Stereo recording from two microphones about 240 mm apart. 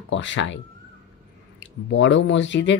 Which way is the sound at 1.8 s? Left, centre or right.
Left.